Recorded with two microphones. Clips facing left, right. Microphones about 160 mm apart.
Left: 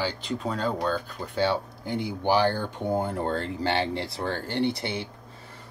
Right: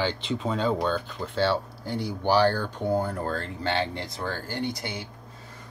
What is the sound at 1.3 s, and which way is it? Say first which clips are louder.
Speech: even; 15° left (ahead or behind).